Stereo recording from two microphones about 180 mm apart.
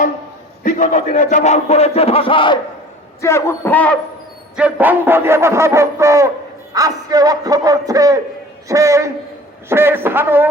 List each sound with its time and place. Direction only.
0.6 s a man's voice: 45° left (ahead or behind); by 2.6 s 30° left (ahead or behind)
3.2 s speech: 15° left (ahead or behind)
4.5 s a man's voice: 10° right (ahead or behind)